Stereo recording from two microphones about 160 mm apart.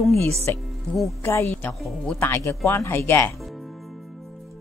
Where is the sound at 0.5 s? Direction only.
10° left (ahead or behind).